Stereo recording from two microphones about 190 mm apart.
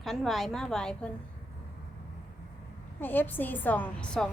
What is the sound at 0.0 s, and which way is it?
A woman's voice, centre (ahead or behind).